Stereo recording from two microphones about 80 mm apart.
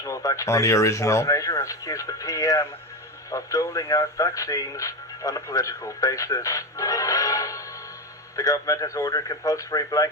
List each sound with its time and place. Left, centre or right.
0.0 s speech: left